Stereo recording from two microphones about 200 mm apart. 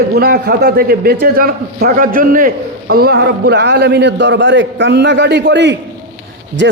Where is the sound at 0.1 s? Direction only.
50° right (ahead or behind).